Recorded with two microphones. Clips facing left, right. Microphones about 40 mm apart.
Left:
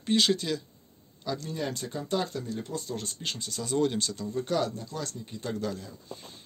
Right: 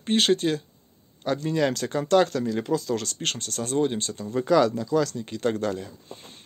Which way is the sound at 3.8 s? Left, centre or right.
Right.